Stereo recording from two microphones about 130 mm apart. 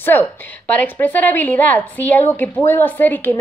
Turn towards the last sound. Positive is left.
turn(degrees=15)  # may be behind; listen again after turning